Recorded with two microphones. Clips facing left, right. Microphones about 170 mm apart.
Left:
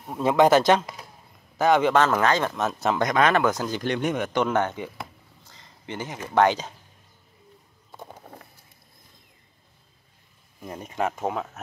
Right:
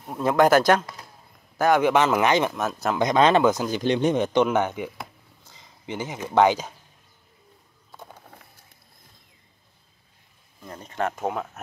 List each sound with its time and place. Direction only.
0.1 s speech: centre (ahead or behind); by 2.5 s 15° right (ahead or behind)
2.5 s speech: centre (ahead or behind)
3.0 s speech: 25° right (ahead or behind)
5.5 s a sound: 15° right (ahead or behind)
6.3 s speech: 10° right (ahead or behind)
10.6 s speech: 15° left (ahead or behind); by 11.6 s centre (ahead or behind)